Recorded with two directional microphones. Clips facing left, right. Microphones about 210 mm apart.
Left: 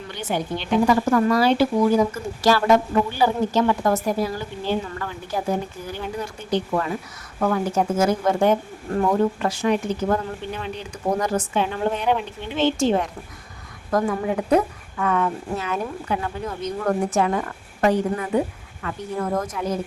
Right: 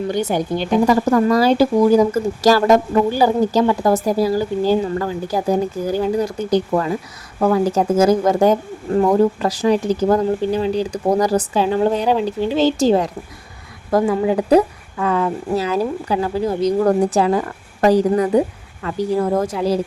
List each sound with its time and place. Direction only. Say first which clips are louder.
0.1 s speech: right 3 dB; 40° right (ahead or behind)